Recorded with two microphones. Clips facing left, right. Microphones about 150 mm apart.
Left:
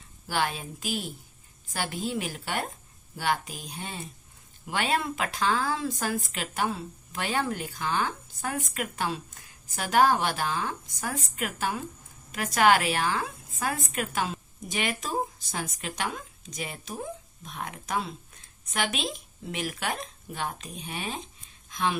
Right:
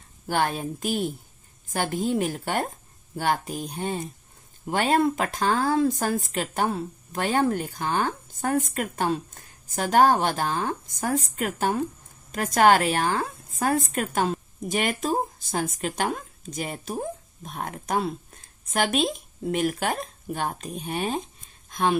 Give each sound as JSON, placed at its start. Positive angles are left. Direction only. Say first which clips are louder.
{"t": 0.3, "sound": "a woman's voice", "louder": "right 4 dB", "side_deg": -50}